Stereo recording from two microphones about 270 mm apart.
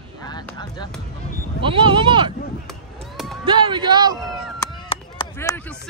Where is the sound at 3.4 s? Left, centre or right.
Centre.